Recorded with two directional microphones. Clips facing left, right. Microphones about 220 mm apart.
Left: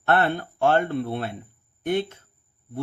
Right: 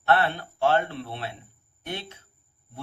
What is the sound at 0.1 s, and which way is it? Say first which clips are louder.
A man's voice: left 2 dB; 50° left (ahead or behind).